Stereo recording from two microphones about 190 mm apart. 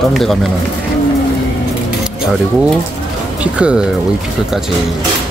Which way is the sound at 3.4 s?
5° right (ahead or behind).